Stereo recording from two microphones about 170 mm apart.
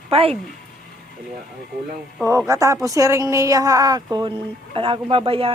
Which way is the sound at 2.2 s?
20° right (ahead or behind).